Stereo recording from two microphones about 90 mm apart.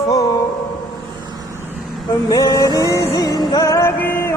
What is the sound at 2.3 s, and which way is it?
Music, 45° left (ahead or behind).